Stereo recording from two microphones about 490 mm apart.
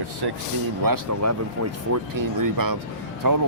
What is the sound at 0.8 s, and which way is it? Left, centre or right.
Speech, right.